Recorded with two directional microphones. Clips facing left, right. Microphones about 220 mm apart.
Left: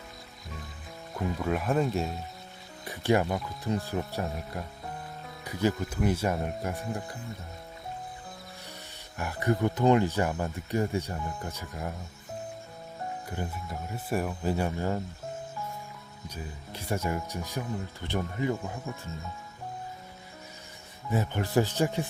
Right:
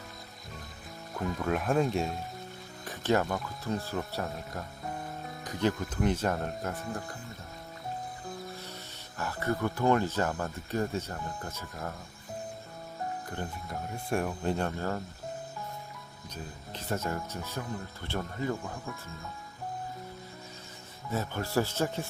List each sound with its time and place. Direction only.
1.4 s speech: centre (ahead or behind)
2.8 s speech: 10° left (ahead or behind)
9.1 s speech: 15° left (ahead or behind)
13.2 s speech: 10° left (ahead or behind)
16.3 s speech: 10° left (ahead or behind)
21.1 s speech: 15° left (ahead or behind)